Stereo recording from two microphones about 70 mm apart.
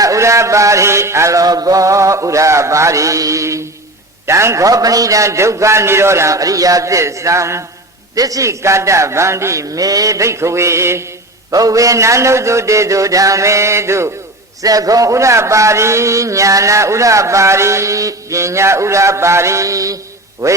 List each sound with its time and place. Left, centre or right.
0.0 s a man's voice: right
4.6 s a man's voice: right
8.1 s a man's voice: right
11.5 s a man's voice: right
14.6 s a man's voice: right